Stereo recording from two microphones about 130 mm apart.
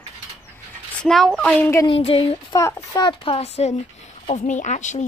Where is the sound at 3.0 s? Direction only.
45° left (ahead or behind).